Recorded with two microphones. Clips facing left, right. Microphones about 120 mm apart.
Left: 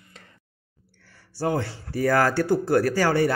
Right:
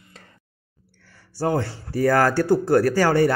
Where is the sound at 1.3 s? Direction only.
40° right (ahead or behind).